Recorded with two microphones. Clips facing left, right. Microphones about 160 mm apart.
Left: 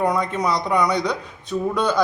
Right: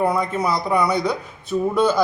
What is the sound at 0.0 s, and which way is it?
A man's voice, 5° right (ahead or behind).